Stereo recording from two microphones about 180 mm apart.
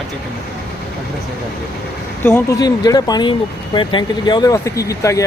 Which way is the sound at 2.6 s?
20° left (ahead or behind).